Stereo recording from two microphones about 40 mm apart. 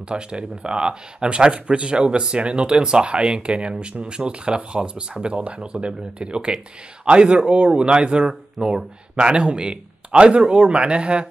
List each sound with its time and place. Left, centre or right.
0.1 s speech: right